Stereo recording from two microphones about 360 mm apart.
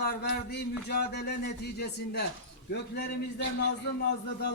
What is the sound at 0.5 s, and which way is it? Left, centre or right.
Speech, left.